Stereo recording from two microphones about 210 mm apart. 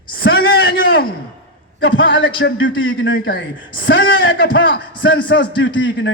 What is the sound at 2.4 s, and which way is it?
Speech, 55° left (ahead or behind).